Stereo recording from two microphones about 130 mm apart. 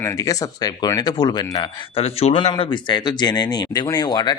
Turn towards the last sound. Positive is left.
turn(degrees=30)  # may be behind; listen again after turning